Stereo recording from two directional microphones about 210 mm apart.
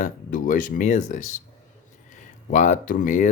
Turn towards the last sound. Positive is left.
turn(degrees=35)  # may be behind; listen again after turning